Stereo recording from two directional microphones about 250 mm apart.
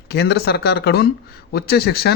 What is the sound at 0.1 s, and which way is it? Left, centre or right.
Speech, left.